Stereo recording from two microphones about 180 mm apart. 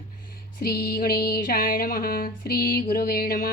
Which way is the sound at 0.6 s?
60° left (ahead or behind).